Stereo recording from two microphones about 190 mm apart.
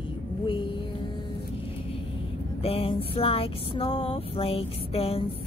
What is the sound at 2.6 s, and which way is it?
Music, 30° left (ahead or behind).